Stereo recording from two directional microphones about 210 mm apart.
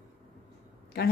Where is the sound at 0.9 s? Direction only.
50° left (ahead or behind).